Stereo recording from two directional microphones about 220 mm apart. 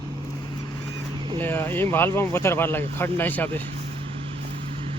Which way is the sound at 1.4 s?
10° left (ahead or behind).